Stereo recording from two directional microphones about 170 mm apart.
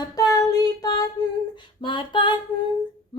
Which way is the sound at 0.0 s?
20° left (ahead or behind).